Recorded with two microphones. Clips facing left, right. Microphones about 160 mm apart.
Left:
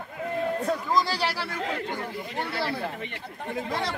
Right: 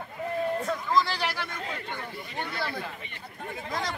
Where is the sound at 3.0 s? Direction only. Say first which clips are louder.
Left 5 dB; 80° left.